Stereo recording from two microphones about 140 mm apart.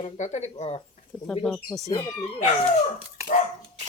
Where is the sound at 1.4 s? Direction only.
15° left (ahead or behind).